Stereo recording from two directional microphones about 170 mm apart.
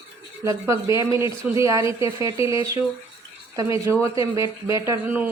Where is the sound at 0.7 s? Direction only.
20° right (ahead or behind).